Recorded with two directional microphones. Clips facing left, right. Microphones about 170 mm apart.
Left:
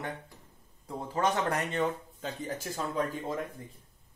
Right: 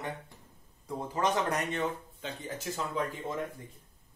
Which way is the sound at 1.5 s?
35° left (ahead or behind).